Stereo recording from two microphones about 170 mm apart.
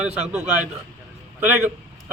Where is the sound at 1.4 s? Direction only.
10° right (ahead or behind).